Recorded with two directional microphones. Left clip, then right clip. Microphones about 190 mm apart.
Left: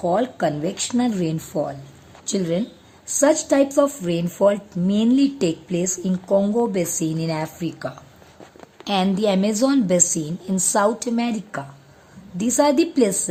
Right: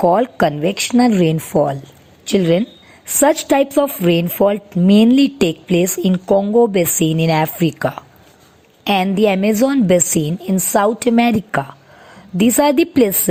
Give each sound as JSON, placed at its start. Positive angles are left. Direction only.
{"t": 0.1, "sound": "a woman's voice", "side_deg": -35}
{"t": 11.1, "sound": "a woman's voice", "side_deg": -30}